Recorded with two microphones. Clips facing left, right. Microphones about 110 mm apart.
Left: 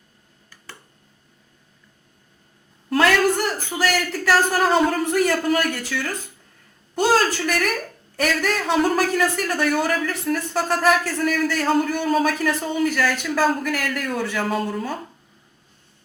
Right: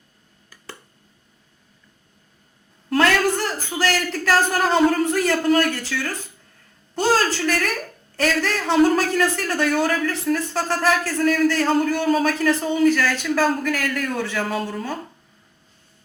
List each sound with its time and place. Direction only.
2.9 s a sound: 10° left (ahead or behind)
3.8 s a man's voice: 10° left (ahead or behind)
5.1 s a man's voice: 15° left (ahead or behind); by 12.3 s centre (ahead or behind)
12.3 s a man's voice: 10° left (ahead or behind)